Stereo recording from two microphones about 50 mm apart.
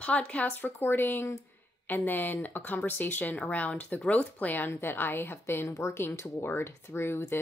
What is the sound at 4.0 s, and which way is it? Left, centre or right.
A woman's voice, left.